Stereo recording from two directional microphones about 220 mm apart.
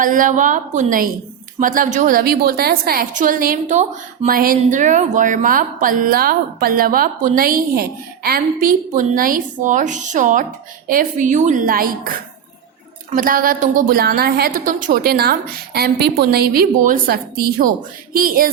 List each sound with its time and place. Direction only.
0.0 s a woman's voice: 35° right (ahead or behind)
13.1 s a woman's voice: 40° right (ahead or behind)